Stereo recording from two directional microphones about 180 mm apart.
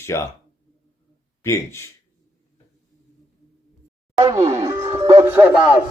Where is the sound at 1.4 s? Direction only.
15° left (ahead or behind).